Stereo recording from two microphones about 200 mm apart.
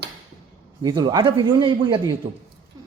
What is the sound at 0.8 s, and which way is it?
Speech, 20° right (ahead or behind).